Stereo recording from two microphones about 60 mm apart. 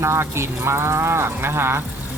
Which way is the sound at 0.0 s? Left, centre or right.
Right.